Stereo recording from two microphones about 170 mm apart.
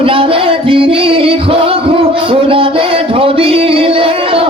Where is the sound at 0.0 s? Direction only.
30° right (ahead or behind).